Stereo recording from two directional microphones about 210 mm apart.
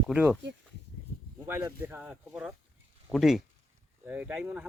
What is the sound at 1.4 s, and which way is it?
Speech, 10° right (ahead or behind).